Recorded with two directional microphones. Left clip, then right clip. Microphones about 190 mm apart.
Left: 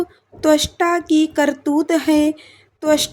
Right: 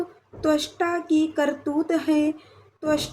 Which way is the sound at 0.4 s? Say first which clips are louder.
Left 8 dB; 50° left (ahead or behind).